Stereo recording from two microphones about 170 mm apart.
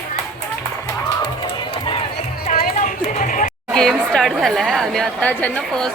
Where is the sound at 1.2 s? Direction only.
25° left (ahead or behind).